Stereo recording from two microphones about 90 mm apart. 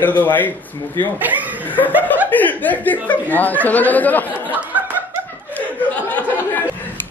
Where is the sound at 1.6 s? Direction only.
20° left (ahead or behind).